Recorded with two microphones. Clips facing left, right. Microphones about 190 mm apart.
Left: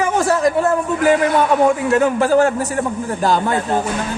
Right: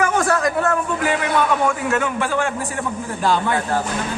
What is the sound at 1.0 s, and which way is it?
A man's voice, 40° left (ahead or behind).